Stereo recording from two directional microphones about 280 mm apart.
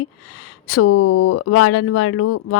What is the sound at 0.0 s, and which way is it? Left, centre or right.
Speech, left.